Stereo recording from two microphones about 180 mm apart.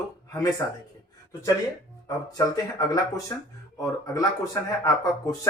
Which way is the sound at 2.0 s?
20° left (ahead or behind).